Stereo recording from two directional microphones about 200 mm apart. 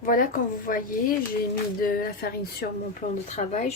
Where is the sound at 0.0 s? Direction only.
45° left (ahead or behind).